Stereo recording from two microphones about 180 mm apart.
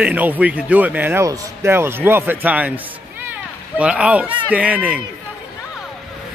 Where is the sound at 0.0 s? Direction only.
10° right (ahead or behind).